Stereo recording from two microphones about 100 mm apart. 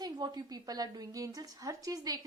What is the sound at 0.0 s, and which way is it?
A woman's voice, 45° right (ahead or behind).